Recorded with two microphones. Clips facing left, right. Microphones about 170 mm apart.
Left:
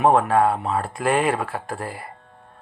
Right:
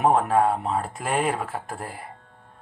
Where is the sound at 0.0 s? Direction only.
90° left.